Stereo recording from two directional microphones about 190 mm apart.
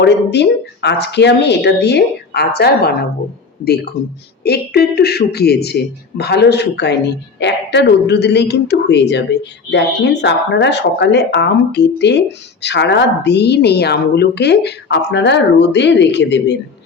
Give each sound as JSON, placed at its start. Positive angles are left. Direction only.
{"t": 0.0, "sound": "a woman's voice", "side_deg": 65}
{"t": 4.4, "sound": "a woman's voice", "side_deg": 55}